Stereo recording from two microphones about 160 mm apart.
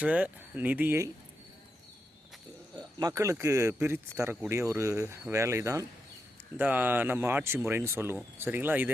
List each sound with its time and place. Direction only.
0.0 s speech: 10° right (ahead or behind)
2.7 s speech: 20° right (ahead or behind)